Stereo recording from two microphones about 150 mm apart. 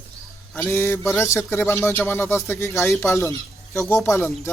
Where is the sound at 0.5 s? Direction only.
15° left (ahead or behind).